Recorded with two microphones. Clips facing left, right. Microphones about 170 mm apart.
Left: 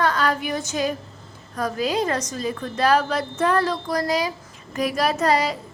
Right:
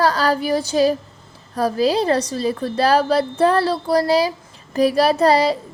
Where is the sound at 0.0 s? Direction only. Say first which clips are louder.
Right 4 dB; 35° right (ahead or behind).